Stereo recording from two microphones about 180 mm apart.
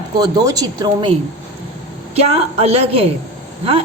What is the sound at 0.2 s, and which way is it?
Speech, 20° right (ahead or behind).